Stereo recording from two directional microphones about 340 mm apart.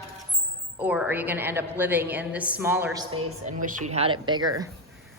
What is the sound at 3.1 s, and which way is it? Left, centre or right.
A woman's voice, right.